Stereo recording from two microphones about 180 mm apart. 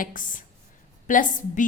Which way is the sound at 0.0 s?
50° left (ahead or behind).